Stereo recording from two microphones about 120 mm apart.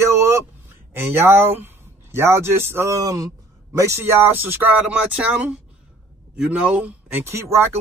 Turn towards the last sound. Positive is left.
turn(degrees=-20)  # may be behind; listen again after turning